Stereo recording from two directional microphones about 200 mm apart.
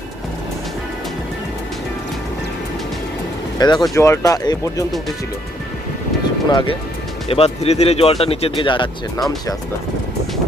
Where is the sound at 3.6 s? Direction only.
20° left (ahead or behind).